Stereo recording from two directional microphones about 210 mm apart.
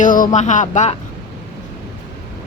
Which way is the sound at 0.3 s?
35° left (ahead or behind).